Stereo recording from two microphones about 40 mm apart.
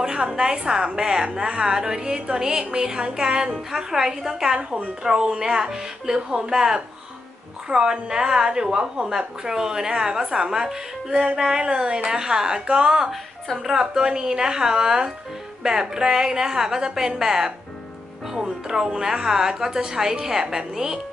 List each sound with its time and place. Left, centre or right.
0.0 s a woman's voice: centre
10.2 s a woman's voice: right
10.5 s a woman's voice: centre